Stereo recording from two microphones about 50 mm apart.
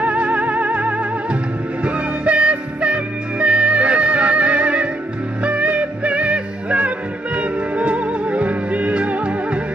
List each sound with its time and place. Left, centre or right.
0.0 s music: right